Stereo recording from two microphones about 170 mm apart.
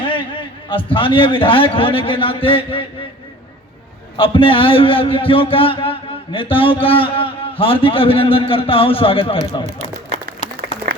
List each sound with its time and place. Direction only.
0.0 s a man's voice: 30° left (ahead or behind)
4.2 s a man's voice: 30° left (ahead or behind)
10.4 s a sound: 40° left (ahead or behind)